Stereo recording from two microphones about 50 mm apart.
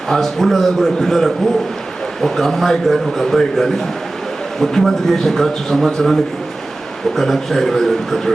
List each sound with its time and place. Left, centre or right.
0.1 s a man's voice: centre
7.2 s speech: centre